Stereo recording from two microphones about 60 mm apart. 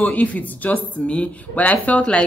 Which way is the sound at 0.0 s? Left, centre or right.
Left.